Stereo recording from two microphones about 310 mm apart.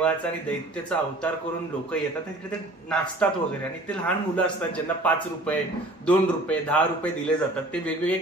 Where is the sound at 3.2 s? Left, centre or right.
Centre.